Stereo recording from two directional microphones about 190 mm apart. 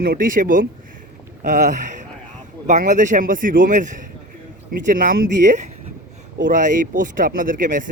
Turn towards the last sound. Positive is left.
turn(degrees=-45)  # may be behind; listen again after turning